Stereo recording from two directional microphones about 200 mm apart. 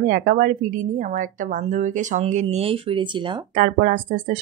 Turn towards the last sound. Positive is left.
turn(degrees=-40)  # may be behind; listen again after turning